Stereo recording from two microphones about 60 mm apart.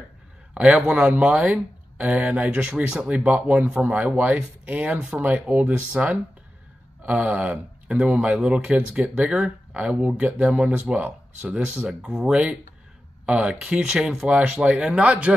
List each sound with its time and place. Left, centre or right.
0.6 s speech: centre
13.2 s speech: centre
14.4 s speech: right